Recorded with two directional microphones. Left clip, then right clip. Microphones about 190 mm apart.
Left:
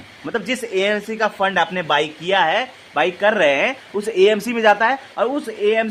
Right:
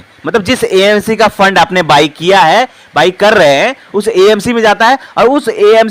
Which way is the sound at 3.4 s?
30° right (ahead or behind).